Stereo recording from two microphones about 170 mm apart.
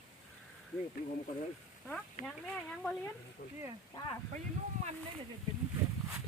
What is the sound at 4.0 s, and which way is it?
Speech, 20° left (ahead or behind).